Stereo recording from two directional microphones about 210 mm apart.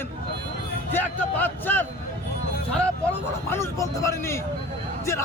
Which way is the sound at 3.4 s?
10° left (ahead or behind).